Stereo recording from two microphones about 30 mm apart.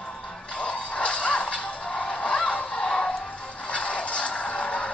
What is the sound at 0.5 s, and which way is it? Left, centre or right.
Music, left.